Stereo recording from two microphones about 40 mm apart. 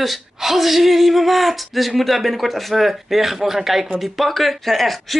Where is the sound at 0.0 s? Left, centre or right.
Centre.